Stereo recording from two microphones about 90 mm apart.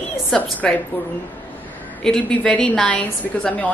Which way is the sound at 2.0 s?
5° left (ahead or behind).